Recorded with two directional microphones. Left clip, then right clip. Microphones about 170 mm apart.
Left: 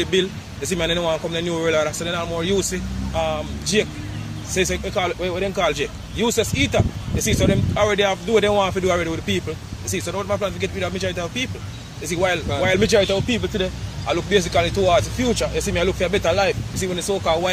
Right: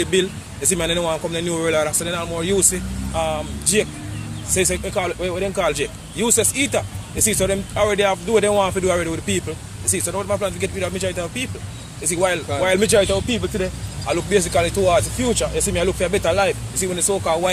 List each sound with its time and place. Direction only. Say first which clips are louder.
0.0 s speech: right 1 dB; 20° right (ahead or behind)